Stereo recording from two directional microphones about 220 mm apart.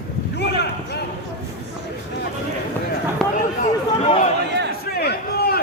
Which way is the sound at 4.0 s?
30° left (ahead or behind).